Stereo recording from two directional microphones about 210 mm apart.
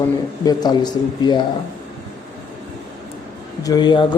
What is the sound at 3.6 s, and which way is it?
Speech, 20° left (ahead or behind).